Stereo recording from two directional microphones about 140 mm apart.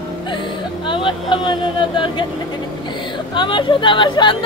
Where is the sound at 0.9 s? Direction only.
35° left (ahead or behind).